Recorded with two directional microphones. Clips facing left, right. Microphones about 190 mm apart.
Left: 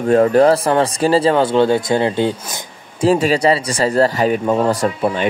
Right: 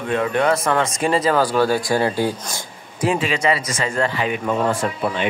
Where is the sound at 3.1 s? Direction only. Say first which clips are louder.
Left 6 dB; 40° left (ahead or behind).